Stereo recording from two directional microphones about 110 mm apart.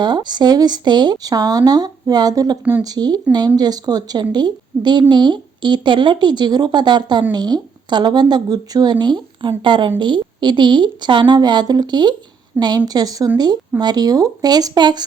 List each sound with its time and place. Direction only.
0.0 s a woman's voice: 40° right (ahead or behind)